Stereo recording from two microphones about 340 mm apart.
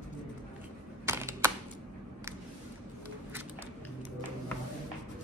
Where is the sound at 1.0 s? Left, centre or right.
Centre.